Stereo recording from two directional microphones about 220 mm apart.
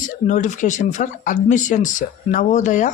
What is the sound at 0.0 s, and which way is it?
Speech, 35° left (ahead or behind).